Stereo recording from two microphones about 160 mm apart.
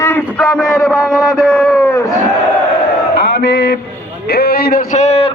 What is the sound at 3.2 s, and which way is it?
Mantra, 90° left.